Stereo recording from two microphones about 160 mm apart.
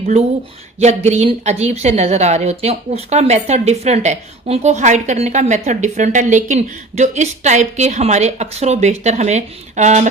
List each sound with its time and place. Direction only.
0.0 s speech: 40° right (ahead or behind)